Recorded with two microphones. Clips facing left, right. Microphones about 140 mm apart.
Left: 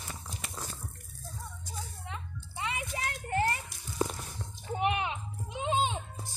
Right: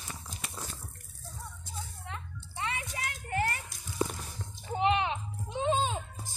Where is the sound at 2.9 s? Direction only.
30° left (ahead or behind).